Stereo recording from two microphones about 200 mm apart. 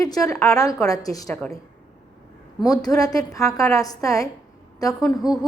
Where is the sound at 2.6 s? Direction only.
15° left (ahead or behind).